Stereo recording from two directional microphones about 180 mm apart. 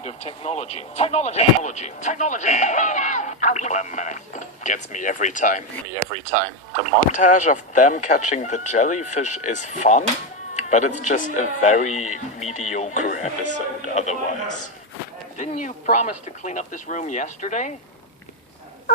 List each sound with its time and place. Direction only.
0.0 s speech: 35° left (ahead or behind)
6.9 s speech: 45° left (ahead or behind)
15.4 s speech: 45° left (ahead or behind)